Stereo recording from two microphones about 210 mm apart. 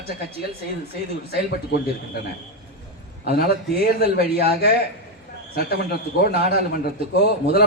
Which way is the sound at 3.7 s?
50° left (ahead or behind).